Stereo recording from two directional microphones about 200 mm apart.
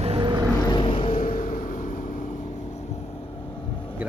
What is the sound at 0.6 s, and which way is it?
Vehicle, 25° left (ahead or behind).